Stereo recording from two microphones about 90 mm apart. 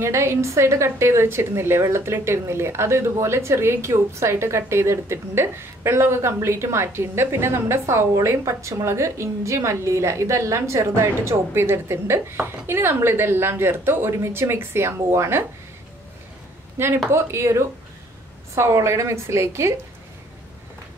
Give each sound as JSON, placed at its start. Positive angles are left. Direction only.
{"t": 0.0, "sound": "a woman's voice", "side_deg": -30}
{"t": 16.7, "sound": "a woman's voice", "side_deg": -30}